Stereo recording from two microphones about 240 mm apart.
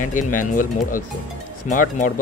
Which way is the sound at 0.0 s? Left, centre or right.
Left.